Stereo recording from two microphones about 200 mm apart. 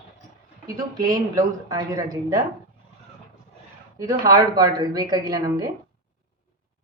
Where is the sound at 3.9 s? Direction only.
15° right (ahead or behind).